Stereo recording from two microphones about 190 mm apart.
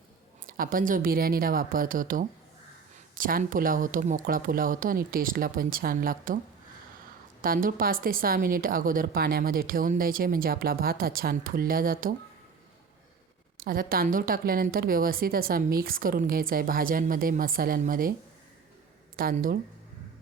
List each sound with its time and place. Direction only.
0.4 s speech: 50° right (ahead or behind)
7.4 s speech: 50° right (ahead or behind)
13.6 s speech: 50° right (ahead or behind)
19.1 s speech: 50° right (ahead or behind)